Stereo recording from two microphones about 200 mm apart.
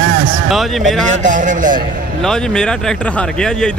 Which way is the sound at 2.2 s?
5° left (ahead or behind).